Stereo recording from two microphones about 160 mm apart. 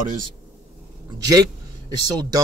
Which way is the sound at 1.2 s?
25° right (ahead or behind).